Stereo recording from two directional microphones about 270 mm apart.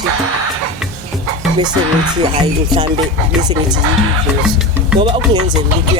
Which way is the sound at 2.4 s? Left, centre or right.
Centre.